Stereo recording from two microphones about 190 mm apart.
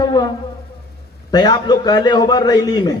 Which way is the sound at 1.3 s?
20° left (ahead or behind).